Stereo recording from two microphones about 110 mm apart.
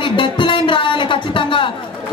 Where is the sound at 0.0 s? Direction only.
50° left (ahead or behind).